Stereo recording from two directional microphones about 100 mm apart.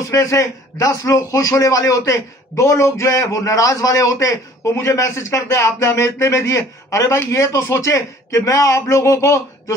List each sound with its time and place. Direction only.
0.1 s a man's voice: 30° left (ahead or behind)